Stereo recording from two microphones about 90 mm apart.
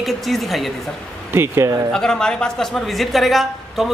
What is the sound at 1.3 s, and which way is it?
Speech, 30° right (ahead or behind).